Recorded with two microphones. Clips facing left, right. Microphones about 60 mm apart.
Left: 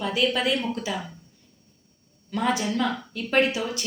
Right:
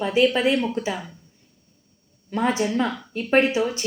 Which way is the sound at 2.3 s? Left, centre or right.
Right.